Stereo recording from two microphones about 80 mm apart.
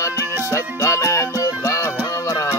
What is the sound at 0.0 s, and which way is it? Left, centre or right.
Music, left.